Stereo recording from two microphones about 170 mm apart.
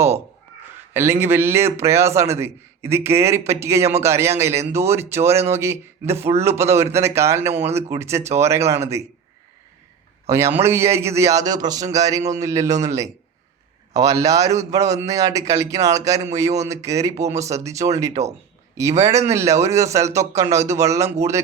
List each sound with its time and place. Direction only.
0.9 s a man's voice: 15° right (ahead or behind)
10.2 s a man's voice: 15° right (ahead or behind)
18.1 s speech: 40° right (ahead or behind)
18.8 s a man's voice: 15° right (ahead or behind)